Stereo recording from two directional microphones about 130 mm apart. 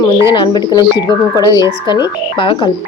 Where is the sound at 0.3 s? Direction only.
35° left (ahead or behind).